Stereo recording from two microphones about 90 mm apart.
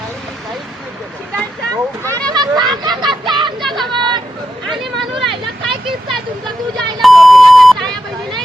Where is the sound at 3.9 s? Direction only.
55° right (ahead or behind).